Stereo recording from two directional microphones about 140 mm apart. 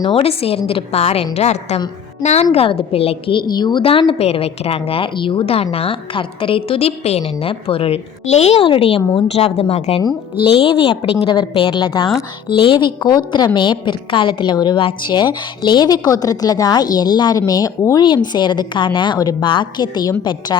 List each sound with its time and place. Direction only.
0.0 s a woman's voice: 40° left (ahead or behind)